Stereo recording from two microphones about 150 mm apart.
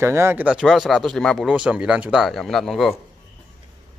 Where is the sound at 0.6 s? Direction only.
Centre (ahead or behind).